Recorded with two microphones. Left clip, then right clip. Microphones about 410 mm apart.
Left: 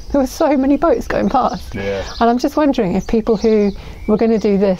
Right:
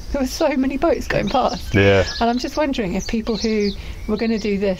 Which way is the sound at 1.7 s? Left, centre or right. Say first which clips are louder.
Right 7 dB; right.